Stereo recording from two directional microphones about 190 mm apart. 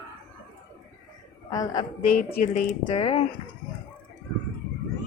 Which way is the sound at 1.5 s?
20° left (ahead or behind).